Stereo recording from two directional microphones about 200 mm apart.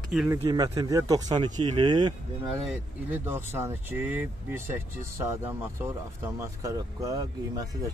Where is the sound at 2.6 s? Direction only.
10° right (ahead or behind).